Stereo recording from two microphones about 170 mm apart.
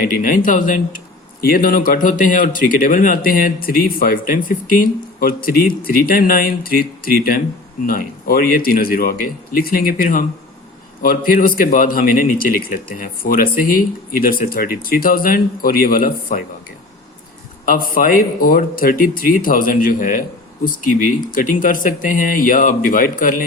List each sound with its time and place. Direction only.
0.0 s speech: 55° left (ahead or behind)
17.7 s speech: 55° left (ahead or behind)